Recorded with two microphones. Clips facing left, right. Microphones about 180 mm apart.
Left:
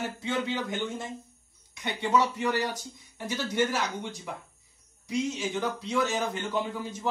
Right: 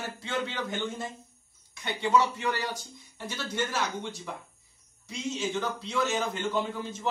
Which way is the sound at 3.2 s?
15° left (ahead or behind).